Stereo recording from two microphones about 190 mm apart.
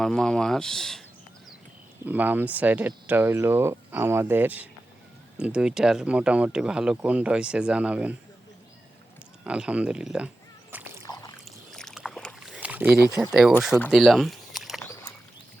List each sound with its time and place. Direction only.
0.0 s speech: centre (ahead or behind)
2.0 s speech: 10° right (ahead or behind)
9.4 s speech: 5° right (ahead or behind)
10.7 s a sound: 10° right (ahead or behind)
11.0 s boat: 20° left (ahead or behind)
11.7 s boat: centre (ahead or behind)
13.6 s speech: centre (ahead or behind)
13.9 s a sound: centre (ahead or behind)